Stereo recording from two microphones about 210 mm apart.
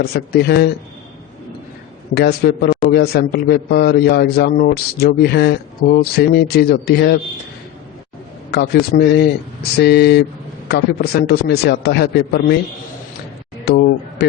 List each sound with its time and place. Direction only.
0.0 s a man's voice: 50° left (ahead or behind)
2.1 s a man's voice: 50° left (ahead or behind)
8.4 s a man's voice: 50° left (ahead or behind)
13.7 s speech: 50° left (ahead or behind)